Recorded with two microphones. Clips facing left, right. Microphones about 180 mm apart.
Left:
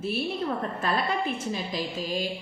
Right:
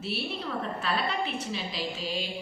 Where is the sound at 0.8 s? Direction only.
45° left (ahead or behind).